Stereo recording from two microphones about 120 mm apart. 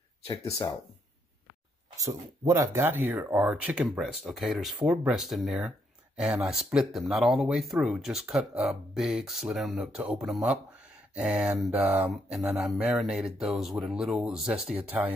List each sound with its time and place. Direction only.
0.3 s speech: 25° left (ahead or behind)
2.0 s speech: 25° right (ahead or behind)
12.4 s speech: 5° right (ahead or behind)